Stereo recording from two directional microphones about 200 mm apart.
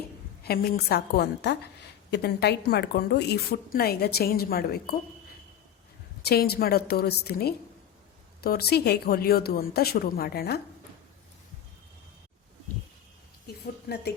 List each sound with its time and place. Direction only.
0.4 s a woman's voice: 50° left (ahead or behind)
6.2 s a woman's voice: 50° left (ahead or behind)
13.8 s speech: 50° left (ahead or behind)